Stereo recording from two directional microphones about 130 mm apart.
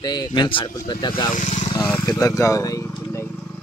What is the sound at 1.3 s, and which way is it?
Speech, 60° left (ahead or behind).